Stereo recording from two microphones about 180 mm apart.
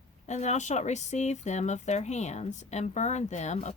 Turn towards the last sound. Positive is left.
turn(degrees=40)  # may be behind; listen again after turning